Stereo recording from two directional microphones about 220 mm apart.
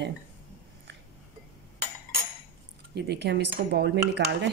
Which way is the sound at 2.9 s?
50° right (ahead or behind).